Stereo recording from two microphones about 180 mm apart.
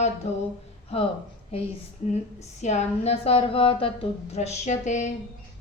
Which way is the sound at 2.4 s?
40° left (ahead or behind).